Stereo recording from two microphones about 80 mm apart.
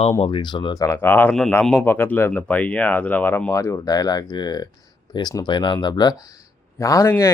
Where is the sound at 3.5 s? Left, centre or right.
Left.